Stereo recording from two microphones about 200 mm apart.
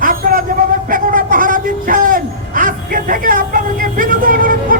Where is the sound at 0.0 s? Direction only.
45° right (ahead or behind).